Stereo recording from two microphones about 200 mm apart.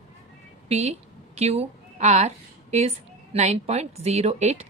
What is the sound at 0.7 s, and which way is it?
A woman's voice, 30° right (ahead or behind).